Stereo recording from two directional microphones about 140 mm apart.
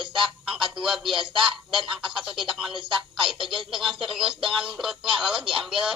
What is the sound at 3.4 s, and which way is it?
Speech, 40° right (ahead or behind).